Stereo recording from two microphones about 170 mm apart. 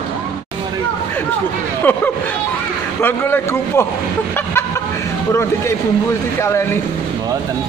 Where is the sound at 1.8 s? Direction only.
10° left (ahead or behind).